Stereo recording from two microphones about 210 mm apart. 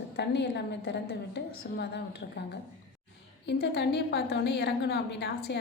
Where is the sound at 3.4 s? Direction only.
55° left (ahead or behind).